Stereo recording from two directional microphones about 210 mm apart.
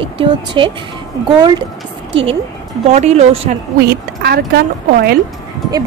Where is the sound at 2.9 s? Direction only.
35° right (ahead or behind).